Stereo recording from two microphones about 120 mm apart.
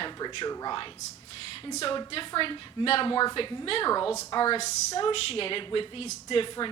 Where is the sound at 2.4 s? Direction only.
50° left (ahead or behind).